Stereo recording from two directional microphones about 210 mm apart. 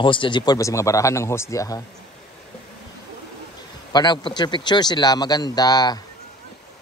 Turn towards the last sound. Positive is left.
turn(degrees=20)  # may be behind; listen again after turning